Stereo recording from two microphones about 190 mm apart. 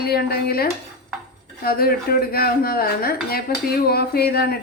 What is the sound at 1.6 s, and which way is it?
Speech, 50° left (ahead or behind).